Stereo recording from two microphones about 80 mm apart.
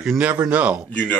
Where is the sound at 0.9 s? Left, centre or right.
Centre.